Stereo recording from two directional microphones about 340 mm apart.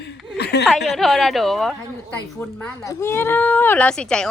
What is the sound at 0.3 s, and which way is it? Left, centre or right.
Chuckle, left.